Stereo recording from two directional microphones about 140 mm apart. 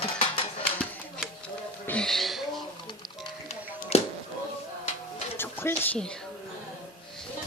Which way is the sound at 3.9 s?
50° left (ahead or behind).